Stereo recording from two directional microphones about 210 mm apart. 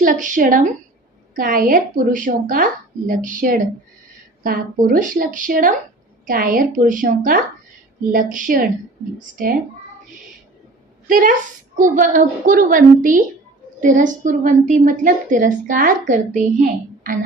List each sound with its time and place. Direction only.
0.0 s a woman's voice: 40° right (ahead or behind)
11.1 s a woman's voice: 40° right (ahead or behind)